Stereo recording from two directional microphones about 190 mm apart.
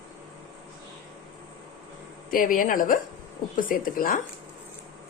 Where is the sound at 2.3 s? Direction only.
45° left (ahead or behind).